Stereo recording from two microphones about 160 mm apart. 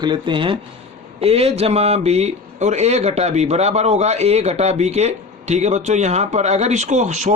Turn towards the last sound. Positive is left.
turn(degrees=-50)  # may be behind; listen again after turning